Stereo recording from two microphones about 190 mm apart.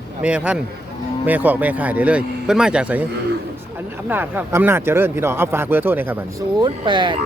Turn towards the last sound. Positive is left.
turn(degrees=-25)  # may be behind; listen again after turning